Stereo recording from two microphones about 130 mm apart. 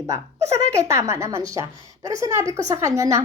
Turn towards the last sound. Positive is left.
turn(degrees=-25)  # may be behind; listen again after turning